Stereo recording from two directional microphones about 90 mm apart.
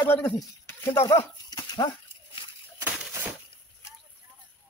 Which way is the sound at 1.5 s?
50° left (ahead or behind).